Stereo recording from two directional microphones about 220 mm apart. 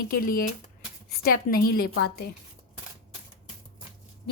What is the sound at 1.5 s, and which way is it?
Speech, 45° left (ahead or behind).